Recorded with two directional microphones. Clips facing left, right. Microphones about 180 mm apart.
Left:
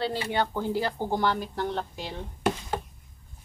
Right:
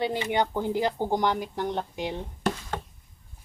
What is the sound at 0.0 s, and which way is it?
Speech, 15° right (ahead or behind).